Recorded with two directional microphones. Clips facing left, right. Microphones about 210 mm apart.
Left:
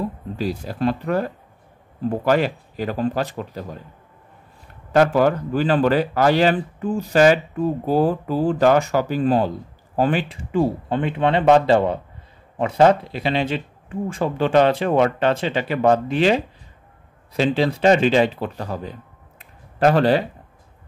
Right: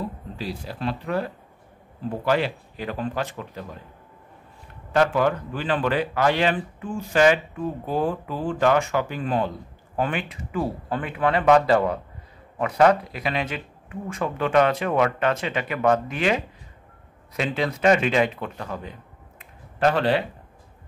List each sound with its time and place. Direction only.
0.4 s speech: 45° left (ahead or behind)
4.9 s speech: 40° left (ahead or behind)